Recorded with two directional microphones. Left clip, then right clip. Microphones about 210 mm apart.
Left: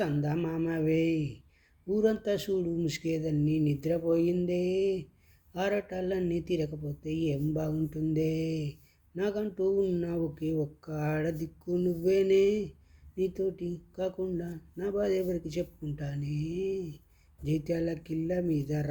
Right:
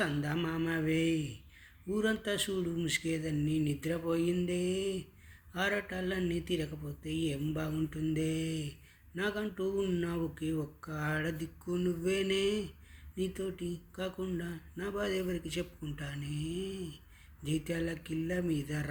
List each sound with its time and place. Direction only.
0.0 s speech: 5° left (ahead or behind)